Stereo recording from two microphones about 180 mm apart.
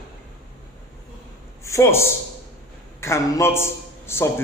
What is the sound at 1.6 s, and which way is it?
Speech, 15° left (ahead or behind).